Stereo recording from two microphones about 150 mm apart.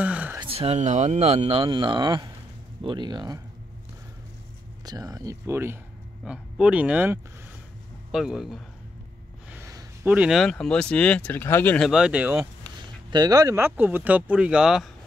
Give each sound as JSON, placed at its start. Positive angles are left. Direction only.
{"t": 0.0, "sound": "a sound", "side_deg": -10}
{"t": 0.4, "sound": "speech", "side_deg": -40}
{"t": 4.8, "sound": "speech", "side_deg": -25}
{"t": 9.5, "sound": "gasp", "side_deg": -20}
{"t": 10.1, "sound": "speech", "side_deg": -5}
{"t": 11.8, "sound": "speech", "side_deg": -5}
{"t": 13.1, "sound": "speech", "side_deg": -25}